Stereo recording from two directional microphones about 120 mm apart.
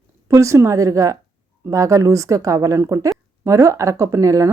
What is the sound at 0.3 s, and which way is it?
Speech, 25° right (ahead or behind).